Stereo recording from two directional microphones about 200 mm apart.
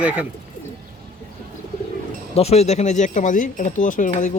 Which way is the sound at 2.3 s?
30° left (ahead or behind).